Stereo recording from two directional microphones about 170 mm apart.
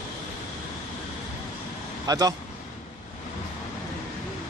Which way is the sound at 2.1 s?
20° right (ahead or behind).